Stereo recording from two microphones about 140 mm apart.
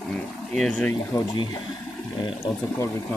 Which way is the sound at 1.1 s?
35° left (ahead or behind).